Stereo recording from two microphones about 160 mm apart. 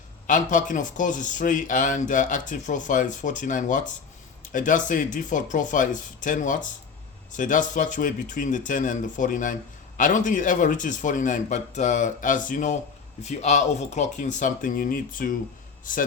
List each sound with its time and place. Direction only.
0.3 s speech: 55° left (ahead or behind)